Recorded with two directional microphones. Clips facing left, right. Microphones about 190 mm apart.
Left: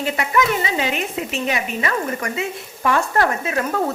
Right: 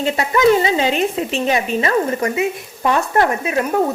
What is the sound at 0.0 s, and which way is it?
A woman's voice, 30° right (ahead or behind).